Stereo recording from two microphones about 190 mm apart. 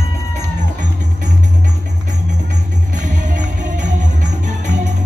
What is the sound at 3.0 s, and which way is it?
Music, 40° right (ahead or behind).